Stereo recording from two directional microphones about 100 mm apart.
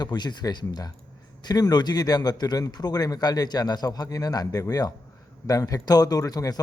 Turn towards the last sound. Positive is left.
turn(degrees=40)  # may be behind; listen again after turning